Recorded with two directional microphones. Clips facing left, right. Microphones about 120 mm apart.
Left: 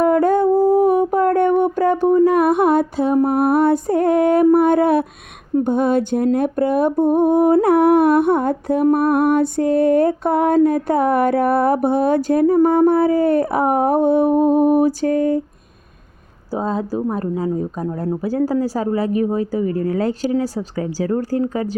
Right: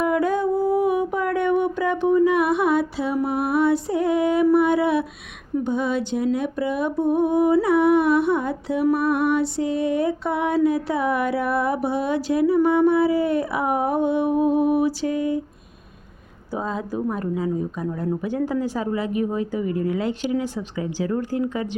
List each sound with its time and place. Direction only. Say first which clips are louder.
0.0 s music: left 6 dB; 45° left (ahead or behind)
5.5 s a sound: left 6 dB; 50° left (ahead or behind)
16.5 s speech: left 5 dB; 35° left (ahead or behind)